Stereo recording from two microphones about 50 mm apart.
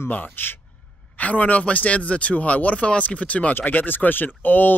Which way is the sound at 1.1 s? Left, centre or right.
Left.